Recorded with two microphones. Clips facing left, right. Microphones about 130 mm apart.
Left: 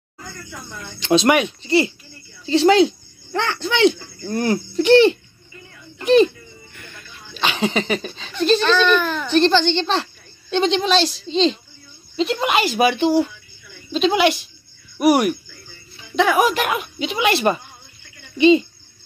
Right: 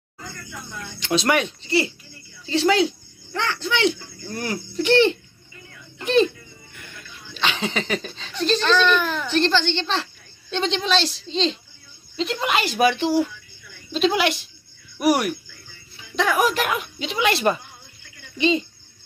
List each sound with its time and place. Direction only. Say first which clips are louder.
0.9 s speech: left 5 dB; 25° left (ahead or behind)
4.8 s speech: left 5 dB; 10° left (ahead or behind)
7.3 s speech: left 4 dB; 10° left (ahead or behind)
15.0 s speech: left 4 dB; 15° left (ahead or behind)